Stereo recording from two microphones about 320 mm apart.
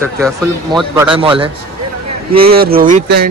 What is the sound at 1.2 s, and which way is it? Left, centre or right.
Speech, centre.